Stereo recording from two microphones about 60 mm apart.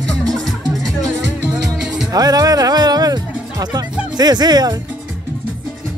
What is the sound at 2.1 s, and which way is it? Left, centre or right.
Music, right.